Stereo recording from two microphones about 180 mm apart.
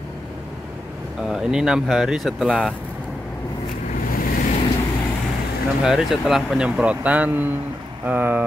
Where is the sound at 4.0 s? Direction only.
50° left (ahead or behind).